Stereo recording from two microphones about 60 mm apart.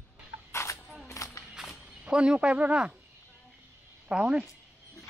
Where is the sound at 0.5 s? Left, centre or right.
Left.